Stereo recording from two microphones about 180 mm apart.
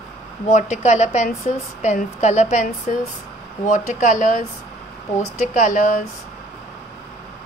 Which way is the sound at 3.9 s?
45° left (ahead or behind).